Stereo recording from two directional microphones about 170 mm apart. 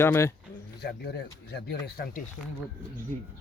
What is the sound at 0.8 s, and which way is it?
Speech, 70° left (ahead or behind).